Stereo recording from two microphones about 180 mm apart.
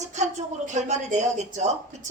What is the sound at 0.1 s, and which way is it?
A woman's voice, 40° right (ahead or behind).